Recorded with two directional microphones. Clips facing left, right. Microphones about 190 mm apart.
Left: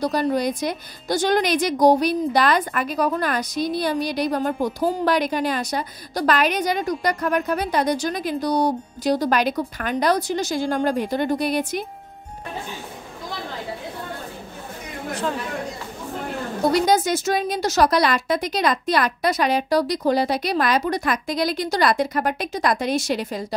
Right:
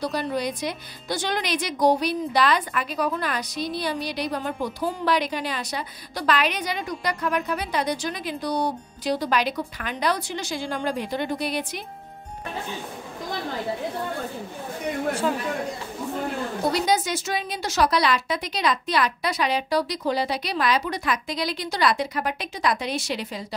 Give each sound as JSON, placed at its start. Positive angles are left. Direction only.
{"t": 0.0, "sound": "a woman's voice", "side_deg": 45}
{"t": 16.7, "sound": "a woman's voice", "side_deg": 45}